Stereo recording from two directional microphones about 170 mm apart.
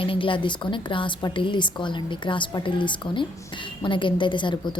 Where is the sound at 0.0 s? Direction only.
30° left (ahead or behind).